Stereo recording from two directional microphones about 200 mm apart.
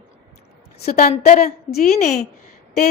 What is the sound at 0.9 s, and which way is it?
A woman's voice, 40° left (ahead or behind).